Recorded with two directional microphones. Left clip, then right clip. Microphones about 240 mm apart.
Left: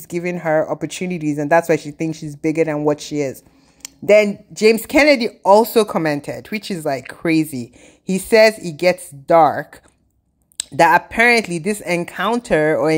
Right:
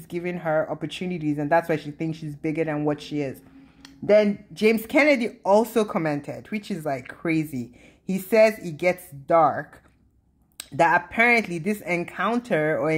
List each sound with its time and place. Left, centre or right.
0.1 s speech: left